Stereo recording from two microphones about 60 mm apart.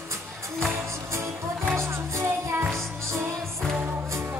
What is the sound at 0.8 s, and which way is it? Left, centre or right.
Music, right.